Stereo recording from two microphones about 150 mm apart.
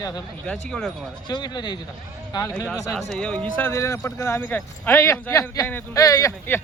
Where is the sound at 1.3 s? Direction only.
30° left (ahead or behind).